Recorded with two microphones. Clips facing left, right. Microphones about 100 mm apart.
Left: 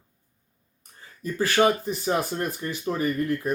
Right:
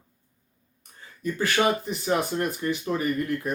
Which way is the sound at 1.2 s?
35° left (ahead or behind).